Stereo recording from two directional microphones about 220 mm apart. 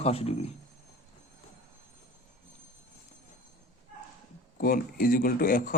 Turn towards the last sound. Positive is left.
turn(degrees=40)  # may be behind; listen again after turning